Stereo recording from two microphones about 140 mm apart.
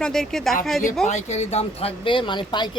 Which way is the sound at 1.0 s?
55° left (ahead or behind).